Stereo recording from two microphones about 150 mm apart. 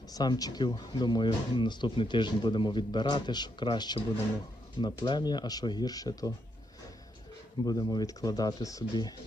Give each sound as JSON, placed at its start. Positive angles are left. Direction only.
{"t": 0.1, "sound": "speech", "side_deg": 25}
{"t": 7.6, "sound": "speech", "side_deg": 25}